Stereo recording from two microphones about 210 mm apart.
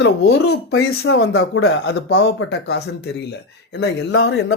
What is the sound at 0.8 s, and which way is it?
Speech, 65° left (ahead or behind).